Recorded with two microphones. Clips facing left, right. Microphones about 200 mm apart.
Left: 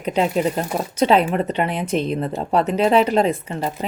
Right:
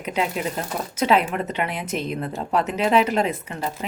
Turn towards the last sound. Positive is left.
turn(degrees=30)  # may be behind; listen again after turning